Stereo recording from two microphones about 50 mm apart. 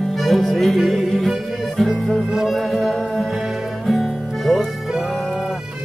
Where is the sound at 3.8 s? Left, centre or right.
Centre.